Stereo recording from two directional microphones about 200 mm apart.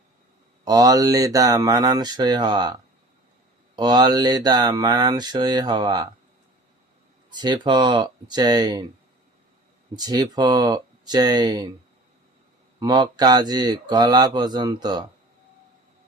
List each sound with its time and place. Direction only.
0.6 s mantra: 20° right (ahead or behind)
3.8 s mantra: 20° right (ahead or behind)
7.3 s mantra: 20° right (ahead or behind)
9.9 s mantra: 20° right (ahead or behind)
12.8 s mantra: 20° right (ahead or behind)